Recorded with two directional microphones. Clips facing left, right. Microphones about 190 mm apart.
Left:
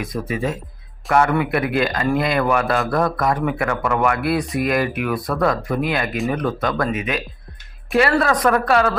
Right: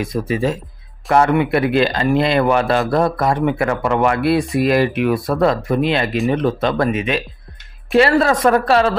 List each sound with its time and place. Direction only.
0.0 s speech: 25° right (ahead or behind)